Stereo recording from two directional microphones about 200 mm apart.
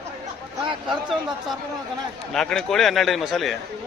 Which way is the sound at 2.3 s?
5° left (ahead or behind).